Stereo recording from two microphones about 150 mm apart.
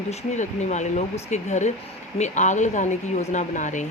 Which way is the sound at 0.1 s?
50° left (ahead or behind).